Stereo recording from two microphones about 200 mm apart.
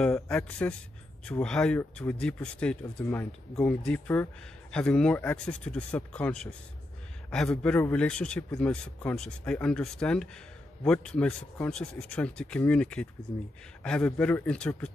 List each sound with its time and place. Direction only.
0.0 s speech: centre (ahead or behind)